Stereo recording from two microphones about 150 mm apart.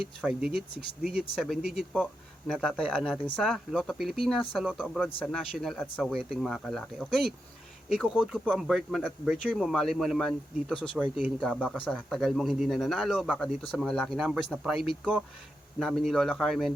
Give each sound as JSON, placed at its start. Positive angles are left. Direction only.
{"t": 0.2, "sound": "speech", "side_deg": -5}
{"t": 0.5, "sound": "speech", "side_deg": -90}
{"t": 1.4, "sound": "speech", "side_deg": 0}